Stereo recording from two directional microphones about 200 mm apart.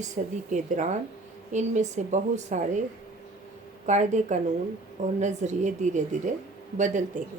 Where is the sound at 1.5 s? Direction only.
35° right (ahead or behind).